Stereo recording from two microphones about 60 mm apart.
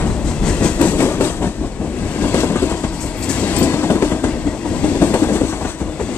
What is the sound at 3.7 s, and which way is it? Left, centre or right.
Train, left.